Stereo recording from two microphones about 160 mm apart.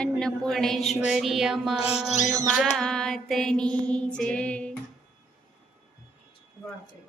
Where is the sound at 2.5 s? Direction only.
Centre (ahead or behind).